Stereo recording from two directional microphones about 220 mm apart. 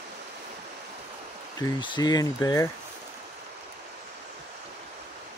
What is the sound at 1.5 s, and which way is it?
Speech, 20° left (ahead or behind).